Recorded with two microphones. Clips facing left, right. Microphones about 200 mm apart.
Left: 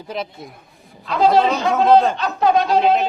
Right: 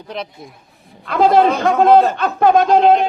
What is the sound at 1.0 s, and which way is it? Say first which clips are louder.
Speech: right 3 dB; 50° right (ahead or behind).